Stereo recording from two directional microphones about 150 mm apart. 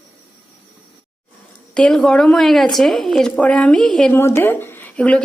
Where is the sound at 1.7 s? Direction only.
5° left (ahead or behind).